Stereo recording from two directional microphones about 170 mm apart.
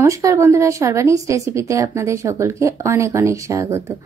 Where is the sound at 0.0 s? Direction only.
20° right (ahead or behind).